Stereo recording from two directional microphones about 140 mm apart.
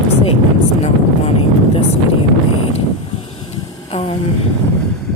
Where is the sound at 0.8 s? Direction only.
45° left (ahead or behind).